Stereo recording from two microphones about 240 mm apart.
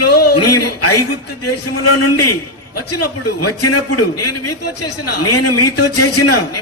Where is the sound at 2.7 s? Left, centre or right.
Left.